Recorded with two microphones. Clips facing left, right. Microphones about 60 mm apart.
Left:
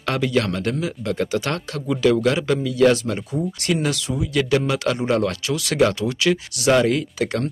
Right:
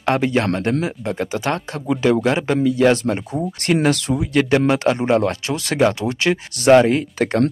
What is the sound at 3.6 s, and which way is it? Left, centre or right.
Speech, right.